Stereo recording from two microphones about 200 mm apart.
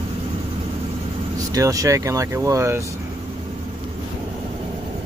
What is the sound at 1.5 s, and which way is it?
Speech, 15° right (ahead or behind).